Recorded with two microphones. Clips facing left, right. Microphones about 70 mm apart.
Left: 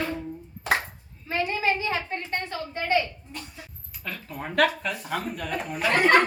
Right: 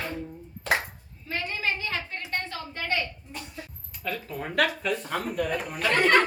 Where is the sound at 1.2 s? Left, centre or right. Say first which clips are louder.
Left 5 dB; left.